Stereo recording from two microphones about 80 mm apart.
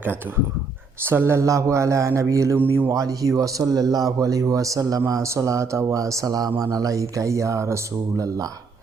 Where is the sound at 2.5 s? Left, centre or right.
Right.